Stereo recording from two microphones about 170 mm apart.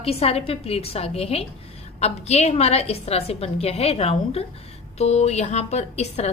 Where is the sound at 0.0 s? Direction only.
35° left (ahead or behind).